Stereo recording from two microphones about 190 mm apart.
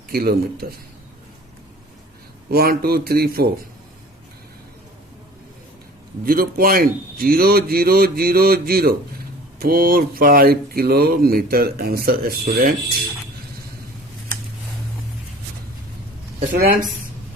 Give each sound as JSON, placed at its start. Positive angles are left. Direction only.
{"t": 0.1, "sound": "speech", "side_deg": -55}
{"t": 2.5, "sound": "speech", "side_deg": -55}
{"t": 6.2, "sound": "speech", "side_deg": -50}
{"t": 16.4, "sound": "speech", "side_deg": -45}